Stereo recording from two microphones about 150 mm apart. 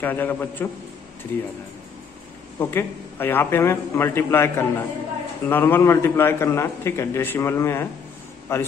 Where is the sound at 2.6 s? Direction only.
15° left (ahead or behind).